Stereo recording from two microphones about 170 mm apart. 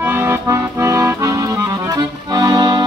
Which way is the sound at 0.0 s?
15° right (ahead or behind).